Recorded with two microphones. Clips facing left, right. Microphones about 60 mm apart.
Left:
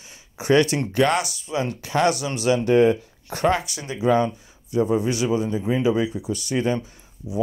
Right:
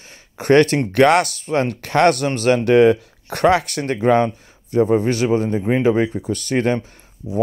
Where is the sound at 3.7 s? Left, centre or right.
Right.